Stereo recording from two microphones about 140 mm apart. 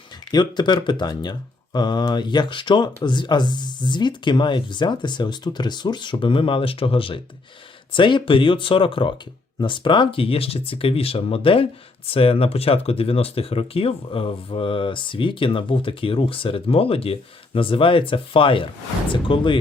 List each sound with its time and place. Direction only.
0.3 s speech: 30° left (ahead or behind)